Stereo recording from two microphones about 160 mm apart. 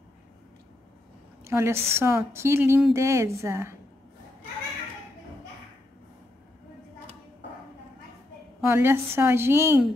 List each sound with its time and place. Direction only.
1.4 s a woman's voice: 15° right (ahead or behind)
8.6 s a woman's voice: 15° right (ahead or behind)